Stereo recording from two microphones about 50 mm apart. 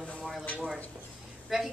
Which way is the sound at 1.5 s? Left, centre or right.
Centre.